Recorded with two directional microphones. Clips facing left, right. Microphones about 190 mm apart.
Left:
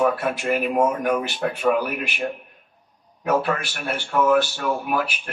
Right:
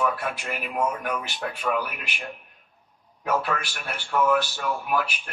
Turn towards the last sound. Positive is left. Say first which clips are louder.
# left 3 dB
turn(degrees=45)  # may be behind; listen again after turning